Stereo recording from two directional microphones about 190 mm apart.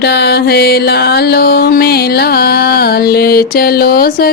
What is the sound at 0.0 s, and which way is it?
Mantra, 60° left (ahead or behind).